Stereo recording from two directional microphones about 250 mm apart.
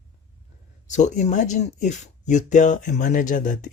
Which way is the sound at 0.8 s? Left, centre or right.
Left.